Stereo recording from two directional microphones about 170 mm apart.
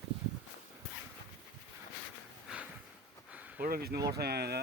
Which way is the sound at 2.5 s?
5° right (ahead or behind).